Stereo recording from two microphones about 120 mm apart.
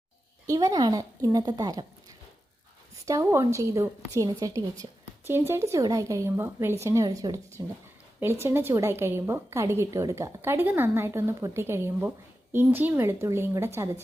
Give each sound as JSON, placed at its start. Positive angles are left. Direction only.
{"t": 0.4, "sound": "a woman's voice", "side_deg": -30}
{"t": 3.1, "sound": "a woman's voice", "side_deg": -25}